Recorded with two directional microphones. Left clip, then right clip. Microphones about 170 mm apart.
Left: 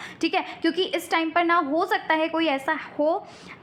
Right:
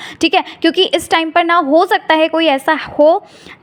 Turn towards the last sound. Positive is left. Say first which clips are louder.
# right 13 dB
turn(degrees=-45)  # may be behind; listen again after turning